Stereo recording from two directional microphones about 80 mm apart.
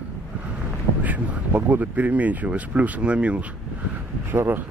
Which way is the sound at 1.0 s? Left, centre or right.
Centre.